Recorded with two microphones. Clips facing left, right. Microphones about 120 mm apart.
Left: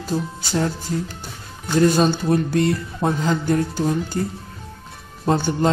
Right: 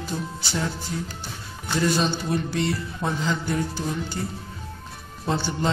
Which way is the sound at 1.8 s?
50° left (ahead or behind).